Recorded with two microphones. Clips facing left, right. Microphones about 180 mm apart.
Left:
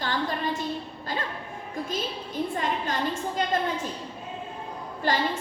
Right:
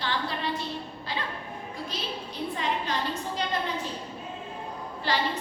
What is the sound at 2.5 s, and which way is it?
Speech, 50° left (ahead or behind).